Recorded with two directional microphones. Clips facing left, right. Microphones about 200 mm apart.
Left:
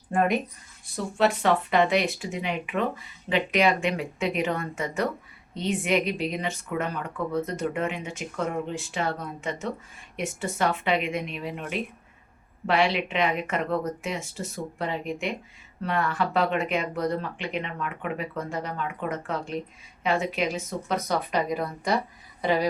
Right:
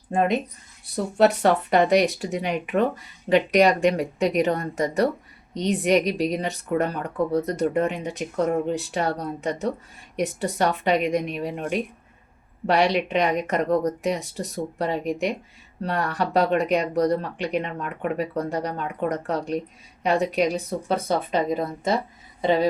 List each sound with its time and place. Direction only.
0.1 s speech: 20° right (ahead or behind)
0.9 s speech: 40° right (ahead or behind); by 22.6 s 25° right (ahead or behind)